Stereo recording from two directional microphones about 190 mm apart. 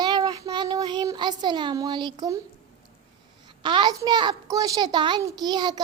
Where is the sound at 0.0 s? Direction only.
20° right (ahead or behind).